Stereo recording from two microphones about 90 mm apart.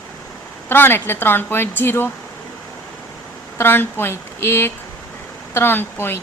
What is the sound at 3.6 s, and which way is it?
Speech, 25° left (ahead or behind).